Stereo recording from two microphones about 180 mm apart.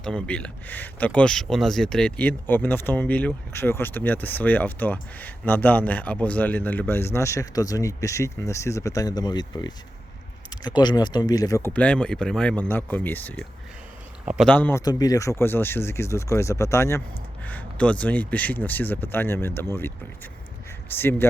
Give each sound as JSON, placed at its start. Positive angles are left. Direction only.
{"t": 0.0, "sound": "speech", "side_deg": 5}
{"t": 14.3, "sound": "speech", "side_deg": 0}
{"t": 14.5, "sound": "speech", "side_deg": 10}
{"t": 20.9, "sound": "speech", "side_deg": 10}